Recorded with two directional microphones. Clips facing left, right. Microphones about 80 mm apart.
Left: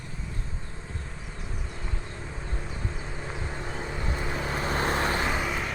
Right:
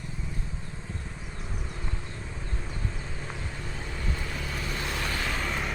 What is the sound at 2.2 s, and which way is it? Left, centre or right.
Vehicle, centre.